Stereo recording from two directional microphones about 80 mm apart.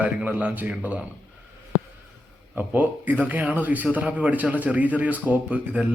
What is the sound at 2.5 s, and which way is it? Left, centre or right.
Speech, right.